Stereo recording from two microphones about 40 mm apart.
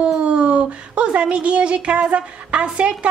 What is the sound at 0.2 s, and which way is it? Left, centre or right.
Speech, right.